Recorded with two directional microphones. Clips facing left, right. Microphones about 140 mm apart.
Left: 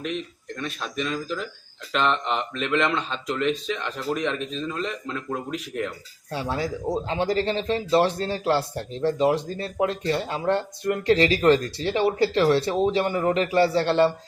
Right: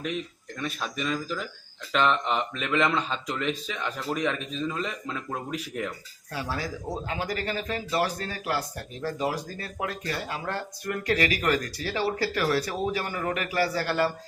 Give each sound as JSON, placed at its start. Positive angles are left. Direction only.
{"t": 0.6, "sound": "speech", "side_deg": -5}
{"t": 6.3, "sound": "speech", "side_deg": 25}